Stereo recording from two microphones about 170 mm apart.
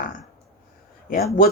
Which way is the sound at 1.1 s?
60° left (ahead or behind).